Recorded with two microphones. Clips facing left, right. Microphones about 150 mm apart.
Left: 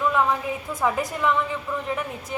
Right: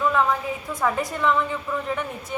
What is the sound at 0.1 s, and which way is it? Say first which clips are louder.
A woman's voice: even; centre (ahead or behind).